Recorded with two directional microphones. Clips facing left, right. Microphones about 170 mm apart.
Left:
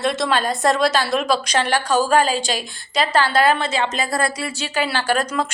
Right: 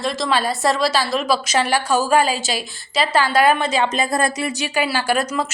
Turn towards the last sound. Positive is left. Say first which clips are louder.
# even
turn(degrees=-10)  # may be behind; listen again after turning